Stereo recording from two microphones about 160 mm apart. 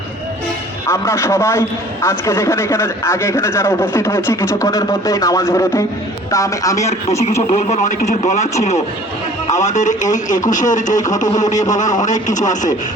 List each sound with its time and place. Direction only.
0.9 s a man's voice: 20° left (ahead or behind)
7.7 s speech: 50° left (ahead or behind)
9.5 s speech: 50° left (ahead or behind)
10.9 s speech: 20° left (ahead or behind)
12.0 s speech: 50° left (ahead or behind)